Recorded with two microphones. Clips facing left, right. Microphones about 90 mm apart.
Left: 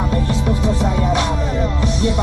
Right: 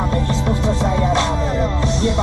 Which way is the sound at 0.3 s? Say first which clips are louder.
Even; 10° left (ahead or behind).